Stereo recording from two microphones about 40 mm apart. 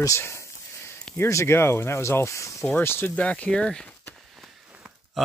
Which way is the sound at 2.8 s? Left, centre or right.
Left.